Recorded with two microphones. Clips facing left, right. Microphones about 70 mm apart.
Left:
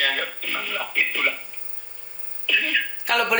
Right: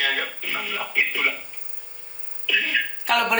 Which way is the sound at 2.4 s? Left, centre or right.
Left.